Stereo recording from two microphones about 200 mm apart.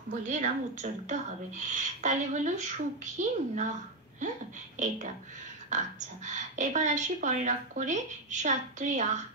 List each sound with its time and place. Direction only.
0.2 s speech: 40° right (ahead or behind)
4.7 s speech: 35° right (ahead or behind)